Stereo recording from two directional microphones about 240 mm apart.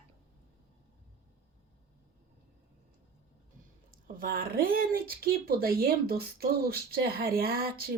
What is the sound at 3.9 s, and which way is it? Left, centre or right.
Speech, right.